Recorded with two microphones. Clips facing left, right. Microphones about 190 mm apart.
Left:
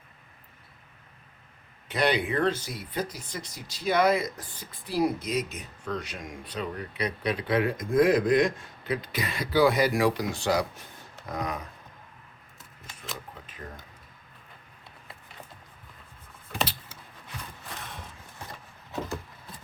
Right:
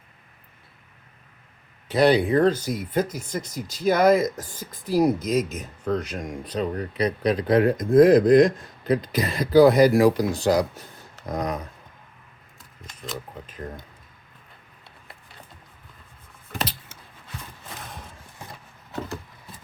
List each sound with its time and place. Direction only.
1.9 s speech: 35° right (ahead or behind)